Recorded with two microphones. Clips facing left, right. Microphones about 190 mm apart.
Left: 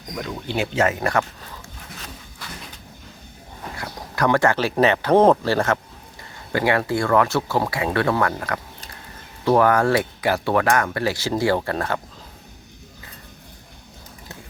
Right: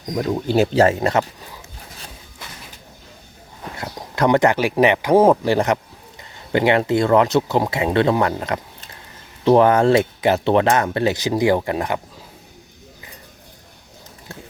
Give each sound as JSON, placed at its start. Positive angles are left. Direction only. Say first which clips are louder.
{"t": 0.2, "sound": "speech", "louder": "right 8 dB", "side_deg": -40}
{"t": 3.8, "sound": "speech", "louder": "right 3 dB", "side_deg": -25}